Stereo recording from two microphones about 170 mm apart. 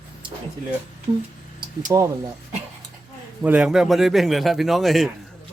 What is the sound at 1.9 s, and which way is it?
Speech, 20° right (ahead or behind).